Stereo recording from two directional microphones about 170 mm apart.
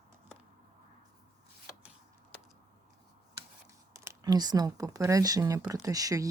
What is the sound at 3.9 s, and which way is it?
Speech, 20° right (ahead or behind).